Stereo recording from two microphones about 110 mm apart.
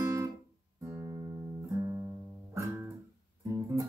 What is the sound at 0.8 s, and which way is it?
Music, 30° right (ahead or behind).